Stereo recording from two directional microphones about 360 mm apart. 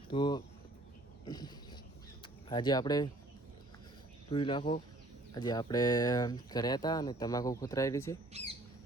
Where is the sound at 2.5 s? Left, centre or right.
Centre.